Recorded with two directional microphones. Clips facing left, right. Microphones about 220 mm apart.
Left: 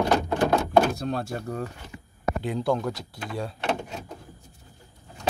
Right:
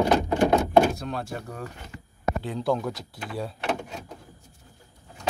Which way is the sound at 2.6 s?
Centre (ahead or behind).